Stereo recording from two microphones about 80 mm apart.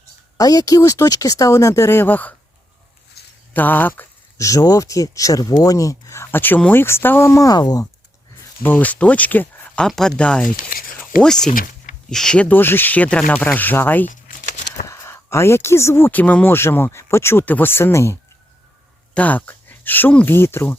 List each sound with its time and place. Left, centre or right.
0.3 s speech: left
3.5 s speech: left
4.4 s speech: left
6.3 s speech: left
8.6 s speech: left
9.8 s speech: centre
12.5 s speech: left
13.4 s speech: left
14.8 s speech: left
16.2 s speech: centre
16.5 s speech: left
19.1 s speech: centre